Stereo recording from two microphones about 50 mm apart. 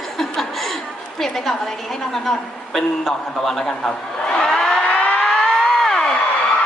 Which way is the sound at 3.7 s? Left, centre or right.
Centre.